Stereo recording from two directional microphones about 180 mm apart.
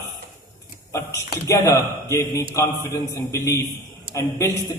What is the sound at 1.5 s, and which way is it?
A man's voice, 15° left (ahead or behind).